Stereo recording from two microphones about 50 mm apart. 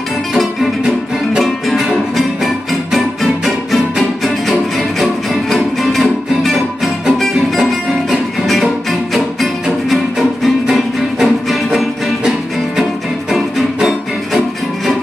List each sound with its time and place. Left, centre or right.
0.3 s music: centre
1.8 s music: centre
13.3 s music: centre